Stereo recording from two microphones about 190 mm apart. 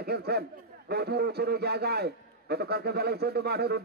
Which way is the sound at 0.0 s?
55° right (ahead or behind).